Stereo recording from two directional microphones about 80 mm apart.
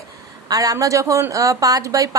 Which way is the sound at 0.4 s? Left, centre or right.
Right.